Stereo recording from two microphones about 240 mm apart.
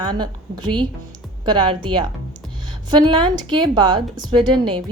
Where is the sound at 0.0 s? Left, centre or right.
Centre.